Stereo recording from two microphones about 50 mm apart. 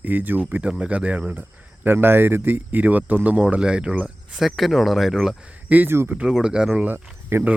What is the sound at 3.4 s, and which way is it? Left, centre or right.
Speech, right.